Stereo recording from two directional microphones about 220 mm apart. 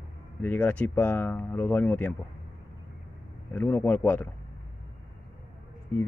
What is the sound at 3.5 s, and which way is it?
Speech, 5° left (ahead or behind).